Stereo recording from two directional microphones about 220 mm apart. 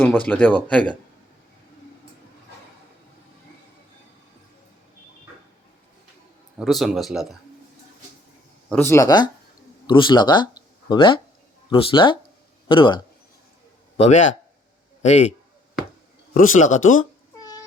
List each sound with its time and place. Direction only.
0.0 s speech: 10° left (ahead or behind)
6.6 s a man's voice: centre (ahead or behind)
8.7 s a man's voice: 10° left (ahead or behind); by 17.1 s 35° left (ahead or behind)